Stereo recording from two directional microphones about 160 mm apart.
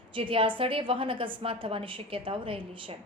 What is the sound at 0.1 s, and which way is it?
A woman's voice, 35° right (ahead or behind).